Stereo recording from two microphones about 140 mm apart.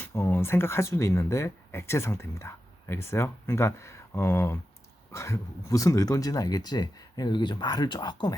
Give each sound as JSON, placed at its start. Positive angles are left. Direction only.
{"t": 0.0, "sound": "speech", "side_deg": 15}